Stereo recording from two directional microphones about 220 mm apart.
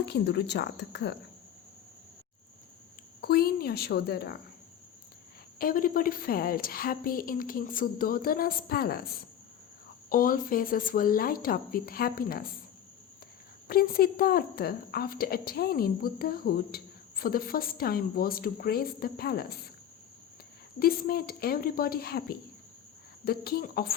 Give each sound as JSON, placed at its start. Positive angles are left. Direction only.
{"t": 0.0, "sound": "a woman's voice", "side_deg": 50}
{"t": 3.2, "sound": "a woman's voice", "side_deg": 45}
{"t": 5.5, "sound": "a woman's voice", "side_deg": 40}
{"t": 10.1, "sound": "a woman's voice", "side_deg": 40}
{"t": 13.7, "sound": "a woman's voice", "side_deg": 40}
{"t": 20.7, "sound": "a woman's voice", "side_deg": 45}